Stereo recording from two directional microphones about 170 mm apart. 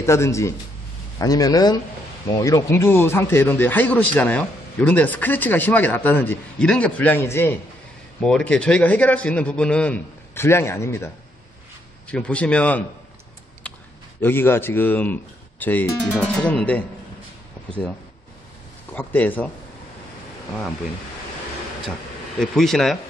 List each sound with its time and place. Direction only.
0.0 s speech: 15° left (ahead or behind)
12.1 s speech: 5° left (ahead or behind)
14.2 s speech: 15° left (ahead or behind)
18.9 s speech: 10° left (ahead or behind)
22.4 s speech: centre (ahead or behind)